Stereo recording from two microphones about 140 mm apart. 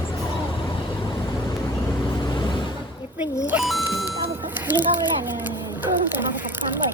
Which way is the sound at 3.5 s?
5° right (ahead or behind).